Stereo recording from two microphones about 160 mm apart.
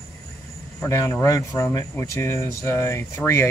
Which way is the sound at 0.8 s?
15° left (ahead or behind).